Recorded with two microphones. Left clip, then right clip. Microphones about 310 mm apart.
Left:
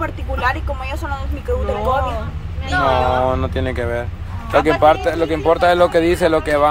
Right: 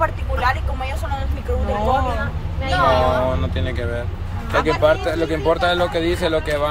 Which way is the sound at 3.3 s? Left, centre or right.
Centre.